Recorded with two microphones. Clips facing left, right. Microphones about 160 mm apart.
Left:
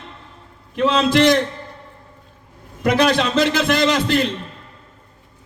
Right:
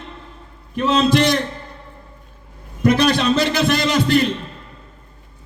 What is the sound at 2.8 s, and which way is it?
A man's voice, 90° left.